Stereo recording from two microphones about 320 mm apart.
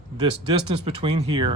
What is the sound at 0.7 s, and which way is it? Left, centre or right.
Speech, centre.